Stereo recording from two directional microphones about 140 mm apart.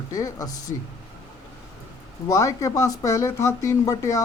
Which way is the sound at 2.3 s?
25° left (ahead or behind).